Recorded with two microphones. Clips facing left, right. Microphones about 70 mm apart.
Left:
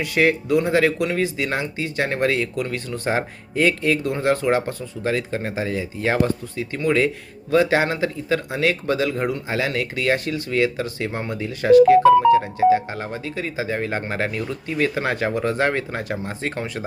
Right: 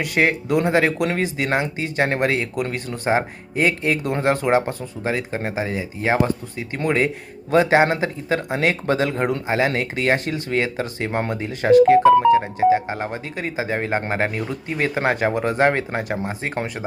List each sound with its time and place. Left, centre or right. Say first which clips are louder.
0.0 s speech: left 1 dB; right